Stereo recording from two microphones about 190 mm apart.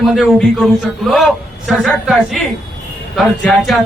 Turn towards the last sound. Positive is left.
turn(degrees=0)  # may be behind; listen again after turning